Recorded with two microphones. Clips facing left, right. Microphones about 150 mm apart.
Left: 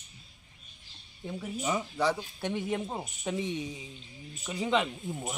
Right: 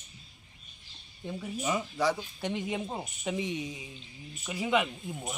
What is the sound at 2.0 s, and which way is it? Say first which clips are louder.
Speech: even; 10° right (ahead or behind).